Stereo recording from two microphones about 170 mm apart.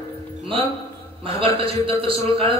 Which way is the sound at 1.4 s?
35° right (ahead or behind).